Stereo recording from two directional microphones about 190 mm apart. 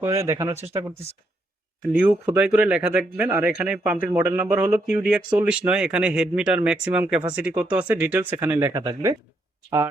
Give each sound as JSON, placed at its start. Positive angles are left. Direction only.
{"t": 0.0, "sound": "speech", "side_deg": -15}
{"t": 1.8, "sound": "speech", "side_deg": -5}